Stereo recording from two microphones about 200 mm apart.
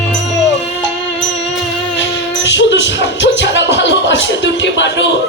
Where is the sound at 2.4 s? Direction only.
65° left (ahead or behind).